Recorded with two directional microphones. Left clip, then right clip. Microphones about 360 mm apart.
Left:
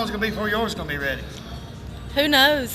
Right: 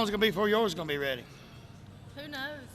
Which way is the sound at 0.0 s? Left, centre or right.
Right.